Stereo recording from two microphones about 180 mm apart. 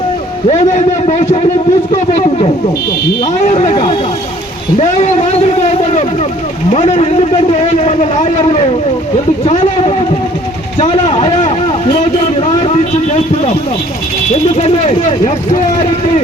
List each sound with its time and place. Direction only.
0.4 s a man's voice: 40° left (ahead or behind)